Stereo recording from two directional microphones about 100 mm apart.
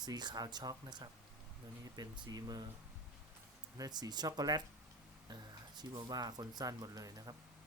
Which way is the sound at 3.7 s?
40° right (ahead or behind).